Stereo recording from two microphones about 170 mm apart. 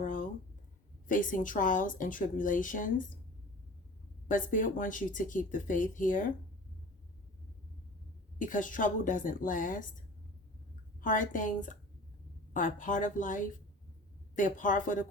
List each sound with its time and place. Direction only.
0.0 s a sound: 50° left (ahead or behind)
1.0 s speech: 50° left (ahead or behind)
4.3 s speech: 50° left (ahead or behind)
8.4 s speech: 50° left (ahead or behind)
11.0 s speech: 50° left (ahead or behind)